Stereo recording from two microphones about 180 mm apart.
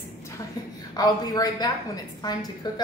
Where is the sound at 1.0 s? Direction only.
20° left (ahead or behind).